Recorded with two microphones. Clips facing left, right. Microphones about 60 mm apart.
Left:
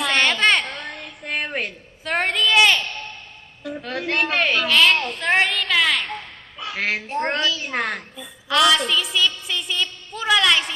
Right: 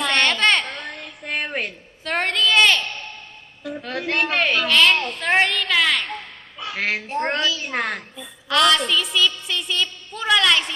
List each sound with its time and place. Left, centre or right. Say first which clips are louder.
0.0 s child singing: even; centre
3.6 s a woman's voice: even; centre